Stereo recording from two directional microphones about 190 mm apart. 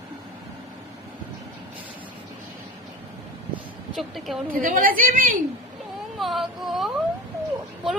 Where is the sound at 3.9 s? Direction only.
Centre (ahead or behind).